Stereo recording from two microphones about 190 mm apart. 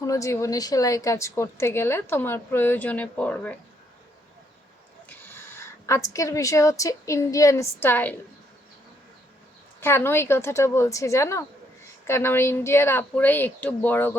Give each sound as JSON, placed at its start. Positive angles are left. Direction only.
{"t": 0.0, "sound": "a woman's voice", "side_deg": 15}
{"t": 5.0, "sound": "a woman's voice", "side_deg": 10}
{"t": 9.8, "sound": "a woman's voice", "side_deg": 10}